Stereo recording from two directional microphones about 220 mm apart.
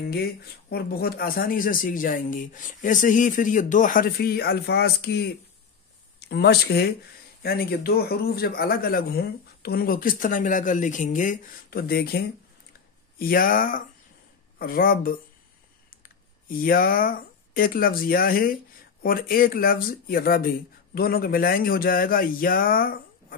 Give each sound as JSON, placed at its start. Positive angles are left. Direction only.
{"t": 0.1, "sound": "speech", "side_deg": 45}
{"t": 13.2, "sound": "speech", "side_deg": 40}